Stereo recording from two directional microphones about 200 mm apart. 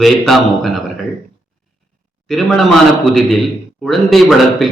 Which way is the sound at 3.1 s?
Centre (ahead or behind).